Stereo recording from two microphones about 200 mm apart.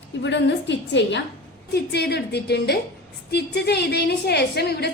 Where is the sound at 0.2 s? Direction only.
60° left (ahead or behind).